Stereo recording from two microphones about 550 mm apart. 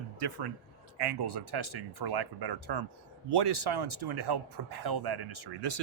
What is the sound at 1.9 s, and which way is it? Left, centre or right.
Speech, right.